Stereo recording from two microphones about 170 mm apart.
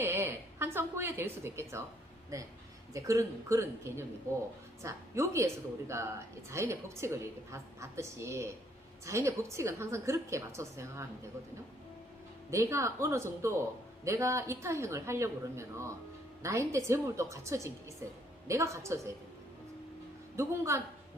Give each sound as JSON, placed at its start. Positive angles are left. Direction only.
{"t": 0.0, "sound": "a woman's voice", "side_deg": -15}
{"t": 2.9, "sound": "a woman's voice", "side_deg": -20}
{"t": 12.5, "sound": "a woman's voice", "side_deg": -15}
{"t": 20.3, "sound": "a woman's voice", "side_deg": -15}